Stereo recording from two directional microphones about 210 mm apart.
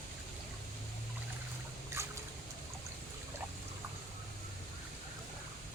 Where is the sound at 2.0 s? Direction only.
15° right (ahead or behind).